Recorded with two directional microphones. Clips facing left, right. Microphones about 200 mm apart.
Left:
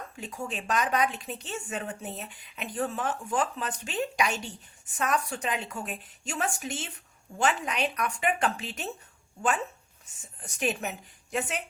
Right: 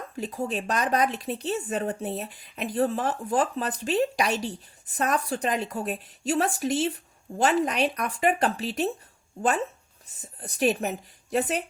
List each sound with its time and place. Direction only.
0.2 s speech: 35° right (ahead or behind)
10.1 s speech: 35° right (ahead or behind)